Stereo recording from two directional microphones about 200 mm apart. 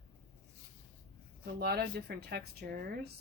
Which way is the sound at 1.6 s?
50° right (ahead or behind).